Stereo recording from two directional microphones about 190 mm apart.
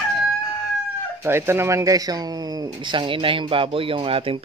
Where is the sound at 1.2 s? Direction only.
15° right (ahead or behind).